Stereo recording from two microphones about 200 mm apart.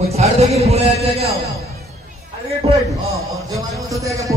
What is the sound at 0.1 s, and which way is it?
Music, 30° right (ahead or behind).